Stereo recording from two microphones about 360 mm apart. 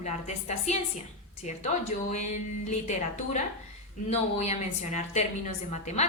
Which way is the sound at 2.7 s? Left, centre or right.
Centre.